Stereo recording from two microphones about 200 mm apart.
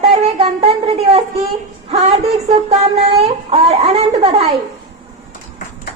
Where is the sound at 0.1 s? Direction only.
30° right (ahead or behind).